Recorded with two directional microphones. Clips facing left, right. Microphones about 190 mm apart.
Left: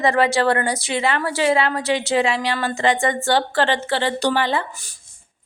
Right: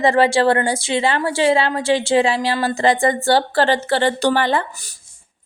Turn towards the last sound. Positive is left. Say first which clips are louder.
# right 3 dB
turn(degrees=-50)  # may be behind; listen again after turning